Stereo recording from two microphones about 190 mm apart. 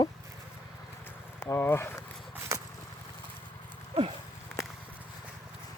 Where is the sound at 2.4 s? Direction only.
15° right (ahead or behind).